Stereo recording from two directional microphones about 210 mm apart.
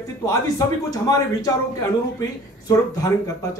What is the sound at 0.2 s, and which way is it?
Speech, 15° left (ahead or behind).